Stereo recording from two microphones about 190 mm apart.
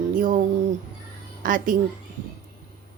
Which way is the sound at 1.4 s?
45° right (ahead or behind).